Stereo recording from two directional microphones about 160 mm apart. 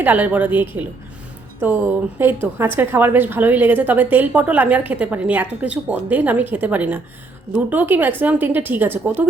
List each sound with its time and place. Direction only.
0.0 s a woman's voice: 10° right (ahead or behind)